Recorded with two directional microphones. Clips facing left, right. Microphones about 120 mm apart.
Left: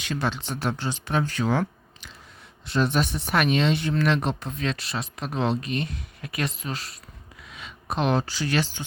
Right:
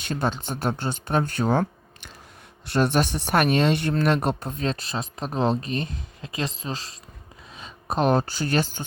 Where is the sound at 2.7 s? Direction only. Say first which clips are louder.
Right 2 dB; 60° right (ahead or behind).